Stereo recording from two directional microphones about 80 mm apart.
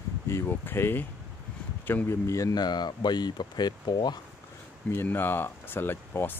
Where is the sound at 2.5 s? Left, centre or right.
Left.